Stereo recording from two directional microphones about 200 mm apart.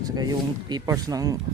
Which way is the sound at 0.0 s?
20° right (ahead or behind).